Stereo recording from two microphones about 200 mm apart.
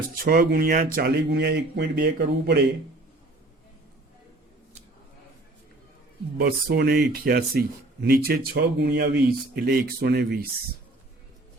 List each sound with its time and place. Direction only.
0.3 s speech: 50° right (ahead or behind)
6.3 s speech: 50° right (ahead or behind)